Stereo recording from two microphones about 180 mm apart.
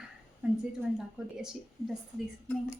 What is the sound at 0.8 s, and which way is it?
A woman's voice, 5° right (ahead or behind).